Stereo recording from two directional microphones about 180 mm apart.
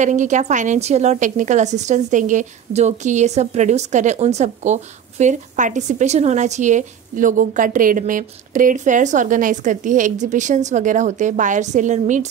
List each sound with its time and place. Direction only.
0.0 s a woman's voice: 40° right (ahead or behind)